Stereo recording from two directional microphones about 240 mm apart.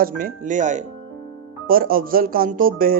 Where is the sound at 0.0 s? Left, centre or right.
Right.